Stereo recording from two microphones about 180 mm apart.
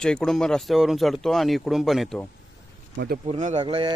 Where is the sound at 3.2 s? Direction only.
40° right (ahead or behind).